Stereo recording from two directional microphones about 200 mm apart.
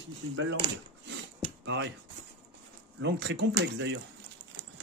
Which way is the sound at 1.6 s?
60° right (ahead or behind).